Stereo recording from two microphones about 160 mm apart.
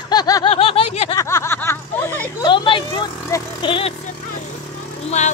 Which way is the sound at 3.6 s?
35° left (ahead or behind).